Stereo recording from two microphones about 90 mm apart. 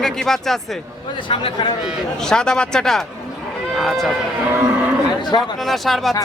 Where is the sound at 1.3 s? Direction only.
75° left (ahead or behind).